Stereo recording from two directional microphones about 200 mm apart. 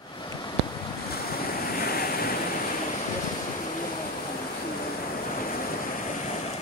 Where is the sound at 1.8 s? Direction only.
45° left (ahead or behind).